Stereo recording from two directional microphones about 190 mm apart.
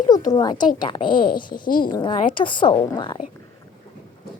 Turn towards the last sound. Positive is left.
turn(degrees=25)  # may be behind; listen again after turning